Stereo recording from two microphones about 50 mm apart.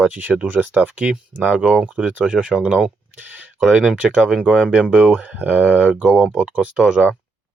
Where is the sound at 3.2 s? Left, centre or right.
Right.